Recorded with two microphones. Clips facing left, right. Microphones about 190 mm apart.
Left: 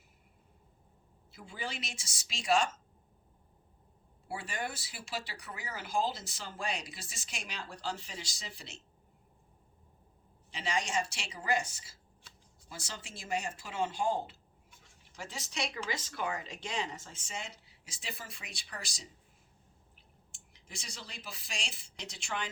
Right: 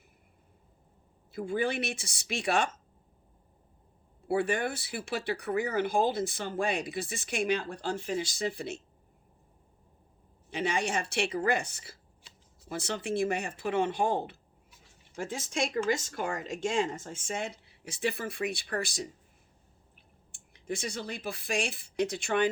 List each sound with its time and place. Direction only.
1.3 s speech: 55° right (ahead or behind)
4.3 s speech: 60° right (ahead or behind)
10.5 s speech: 55° right (ahead or behind)
20.3 s speech: 55° right (ahead or behind)